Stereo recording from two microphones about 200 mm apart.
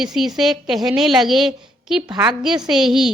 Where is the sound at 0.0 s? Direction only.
Centre (ahead or behind).